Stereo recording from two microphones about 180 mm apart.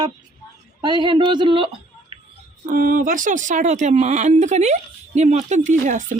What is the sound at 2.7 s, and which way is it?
Speech, 50° right (ahead or behind).